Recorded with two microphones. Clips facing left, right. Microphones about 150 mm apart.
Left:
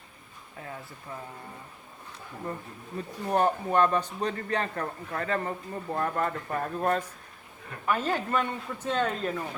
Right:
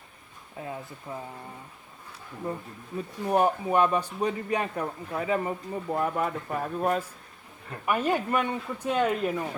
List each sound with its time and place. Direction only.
0.6 s a man's voice: 20° right (ahead or behind)
3.2 s a man's voice: 10° right (ahead or behind)